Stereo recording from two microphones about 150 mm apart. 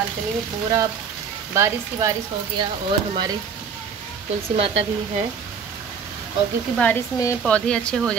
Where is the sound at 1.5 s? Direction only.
20° right (ahead or behind).